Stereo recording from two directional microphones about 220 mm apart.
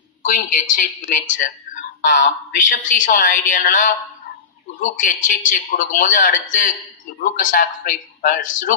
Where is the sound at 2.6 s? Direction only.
35° left (ahead or behind).